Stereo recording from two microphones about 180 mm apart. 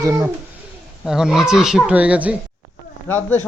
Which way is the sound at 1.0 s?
Centre (ahead or behind).